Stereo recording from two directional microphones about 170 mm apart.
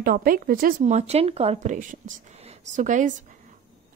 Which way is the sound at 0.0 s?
60° right (ahead or behind).